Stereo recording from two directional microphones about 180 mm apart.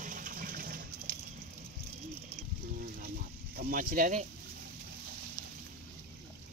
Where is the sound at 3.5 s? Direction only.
50° right (ahead or behind).